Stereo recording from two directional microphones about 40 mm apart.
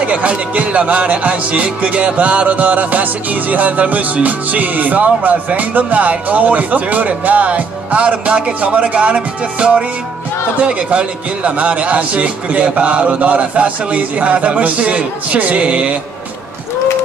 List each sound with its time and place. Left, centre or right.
0.0 s speech: right